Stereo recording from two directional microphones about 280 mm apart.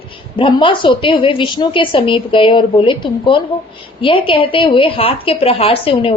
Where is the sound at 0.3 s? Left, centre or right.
Centre.